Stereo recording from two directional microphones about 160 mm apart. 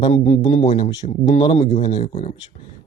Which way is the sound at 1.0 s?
50° left (ahead or behind).